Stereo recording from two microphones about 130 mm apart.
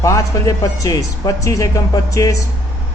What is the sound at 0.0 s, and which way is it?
A man's voice, 25° left (ahead or behind).